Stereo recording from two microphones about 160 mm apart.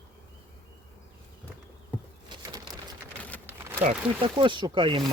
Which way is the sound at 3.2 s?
10° left (ahead or behind).